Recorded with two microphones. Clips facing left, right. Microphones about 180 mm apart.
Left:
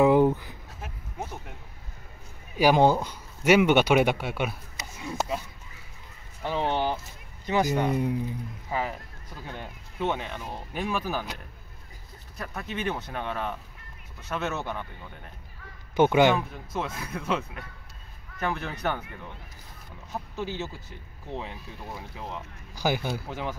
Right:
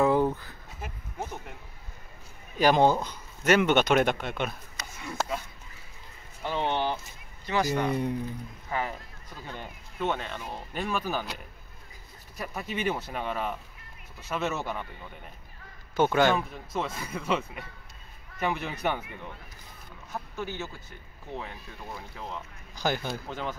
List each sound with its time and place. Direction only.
0.0 s a sound: 15° left (ahead or behind)
0.7 s a sound: centre (ahead or behind)
2.5 s speech: 10° left (ahead or behind)
6.4 s speech: 10° left (ahead or behind)
12.4 s speech: 10° right (ahead or behind)
16.0 s speech: 15° left (ahead or behind)
16.3 s a man's voice: centre (ahead or behind)
20.1 s speech: 15° left (ahead or behind)